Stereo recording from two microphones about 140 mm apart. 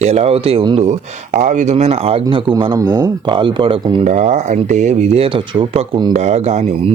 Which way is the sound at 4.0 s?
55° right (ahead or behind).